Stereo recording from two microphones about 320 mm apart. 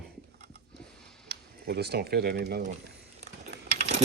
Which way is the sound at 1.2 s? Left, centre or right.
Right.